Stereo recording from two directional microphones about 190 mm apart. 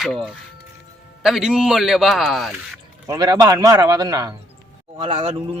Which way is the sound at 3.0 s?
20° right (ahead or behind).